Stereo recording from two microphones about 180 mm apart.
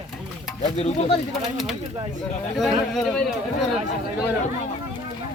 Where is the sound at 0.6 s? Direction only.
35° left (ahead or behind).